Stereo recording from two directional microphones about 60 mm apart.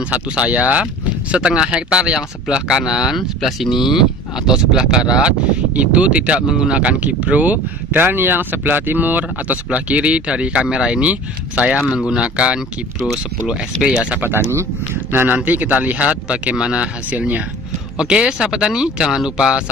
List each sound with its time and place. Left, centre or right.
0.1 s speech: right
15.0 s speech: right